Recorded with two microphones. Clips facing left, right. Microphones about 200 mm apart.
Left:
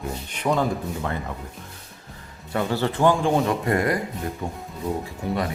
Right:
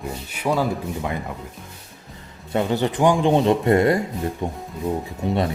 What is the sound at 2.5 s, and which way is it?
Speech, 20° right (ahead or behind).